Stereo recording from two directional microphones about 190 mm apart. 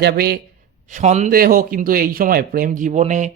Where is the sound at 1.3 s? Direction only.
50° right (ahead or behind).